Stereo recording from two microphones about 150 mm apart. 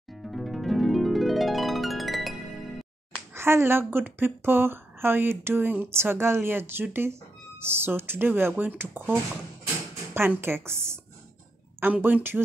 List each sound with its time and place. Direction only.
0.1 s harp: centre (ahead or behind)
3.3 s a woman's voice: 15° right (ahead or behind)